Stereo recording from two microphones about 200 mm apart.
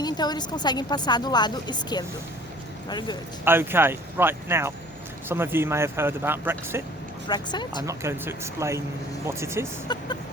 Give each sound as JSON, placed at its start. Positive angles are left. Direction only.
{"t": 0.0, "sound": "a woman's voice", "side_deg": 20}
{"t": 3.4, "sound": "speech", "side_deg": -10}
{"t": 7.3, "sound": "a woman's voice", "side_deg": 20}
{"t": 7.9, "sound": "speech", "side_deg": -15}
{"t": 9.9, "sound": "a woman's voice", "side_deg": 20}